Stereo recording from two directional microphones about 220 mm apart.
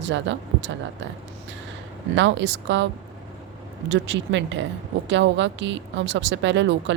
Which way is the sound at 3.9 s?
55° right (ahead or behind).